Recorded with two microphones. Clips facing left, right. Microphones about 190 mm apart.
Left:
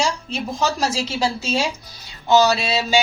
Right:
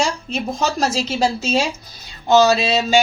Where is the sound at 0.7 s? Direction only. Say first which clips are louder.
Right 3 dB; 45° right (ahead or behind).